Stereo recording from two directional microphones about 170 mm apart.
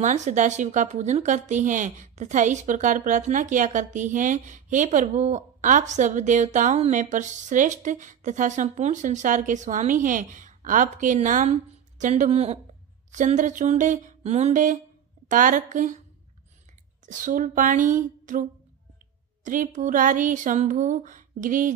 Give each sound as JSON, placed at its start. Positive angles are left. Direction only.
{"t": 0.0, "sound": "a woman's voice", "side_deg": -45}
{"t": 17.0, "sound": "a woman's voice", "side_deg": -50}